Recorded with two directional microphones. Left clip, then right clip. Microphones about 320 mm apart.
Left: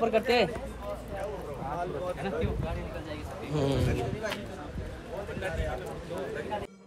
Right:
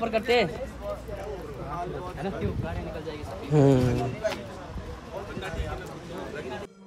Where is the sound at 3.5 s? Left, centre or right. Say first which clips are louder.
Right 9 dB; right.